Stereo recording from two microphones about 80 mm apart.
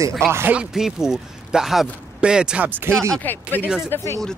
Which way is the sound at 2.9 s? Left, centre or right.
Right.